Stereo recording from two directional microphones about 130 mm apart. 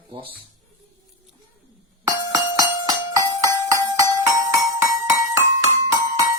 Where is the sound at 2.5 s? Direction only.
25° right (ahead or behind).